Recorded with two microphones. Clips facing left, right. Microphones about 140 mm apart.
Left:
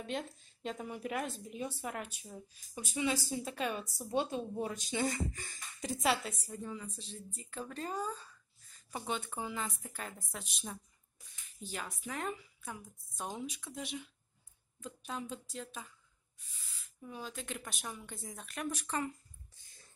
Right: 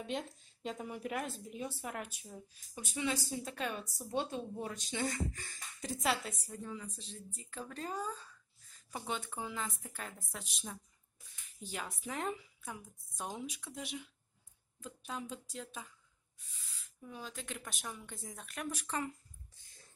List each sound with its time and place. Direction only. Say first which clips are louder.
0.0 s a woman's voice: even; 10° right (ahead or behind)
11.6 s speech: even; 15° right (ahead or behind)
12.6 s speech: left 1 dB; 10° right (ahead or behind)
17.1 s a woman's voice: left 2 dB; 5° left (ahead or behind)